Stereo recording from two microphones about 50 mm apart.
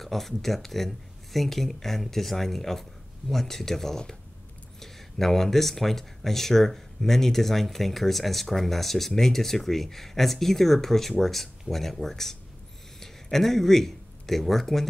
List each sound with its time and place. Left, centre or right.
0.0 s speech: centre